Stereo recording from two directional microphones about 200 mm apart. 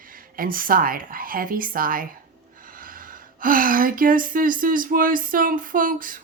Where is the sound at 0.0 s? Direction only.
45° right (ahead or behind).